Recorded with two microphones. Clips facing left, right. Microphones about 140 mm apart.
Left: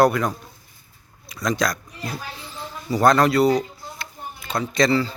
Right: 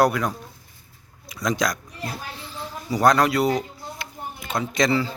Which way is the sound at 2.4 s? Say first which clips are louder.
Right 1 dB; 5° right (ahead or behind).